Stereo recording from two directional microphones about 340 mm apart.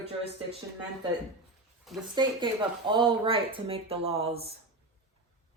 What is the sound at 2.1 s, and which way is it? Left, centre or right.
Speech, centre.